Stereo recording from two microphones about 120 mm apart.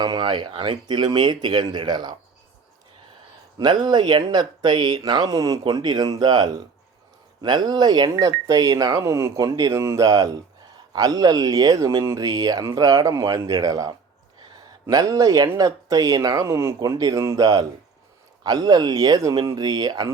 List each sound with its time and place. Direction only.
0.0 s speech: 35° right (ahead or behind)
3.6 s speech: 40° right (ahead or behind)